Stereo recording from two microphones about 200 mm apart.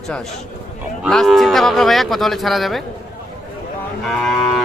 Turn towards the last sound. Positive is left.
turn(degrees=0)  # may be behind; listen again after turning